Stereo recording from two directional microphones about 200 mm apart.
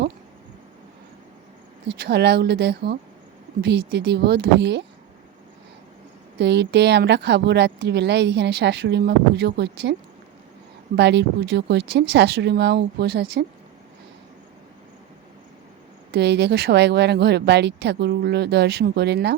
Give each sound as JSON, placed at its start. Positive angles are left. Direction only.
{"t": 2.0, "sound": "speech", "side_deg": -55}
{"t": 6.4, "sound": "speech", "side_deg": -60}
{"t": 10.9, "sound": "speech", "side_deg": -60}
{"t": 16.1, "sound": "speech", "side_deg": -55}